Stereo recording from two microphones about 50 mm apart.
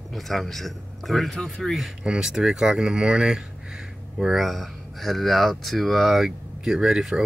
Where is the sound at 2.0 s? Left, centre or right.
Centre.